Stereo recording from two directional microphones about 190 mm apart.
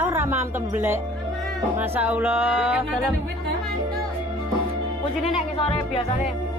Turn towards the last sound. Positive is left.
turn(degrees=30)  # may be behind; listen again after turning